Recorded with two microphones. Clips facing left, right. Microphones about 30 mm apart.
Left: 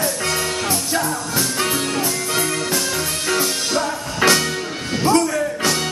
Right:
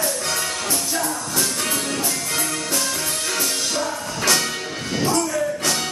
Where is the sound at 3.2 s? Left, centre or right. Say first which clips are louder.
Left 5 dB; centre.